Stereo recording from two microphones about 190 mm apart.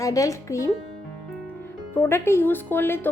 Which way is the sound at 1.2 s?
Centre (ahead or behind).